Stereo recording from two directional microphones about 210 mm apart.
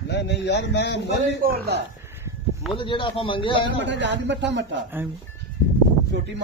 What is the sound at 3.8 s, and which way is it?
Speech, 55° right (ahead or behind).